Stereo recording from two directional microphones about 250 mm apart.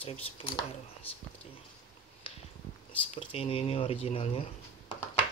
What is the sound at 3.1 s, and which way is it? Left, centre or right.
Speech, left.